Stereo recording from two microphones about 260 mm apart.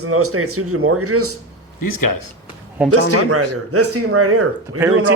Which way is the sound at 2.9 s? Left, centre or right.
Right.